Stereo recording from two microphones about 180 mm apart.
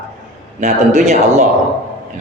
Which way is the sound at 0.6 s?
40° right (ahead or behind).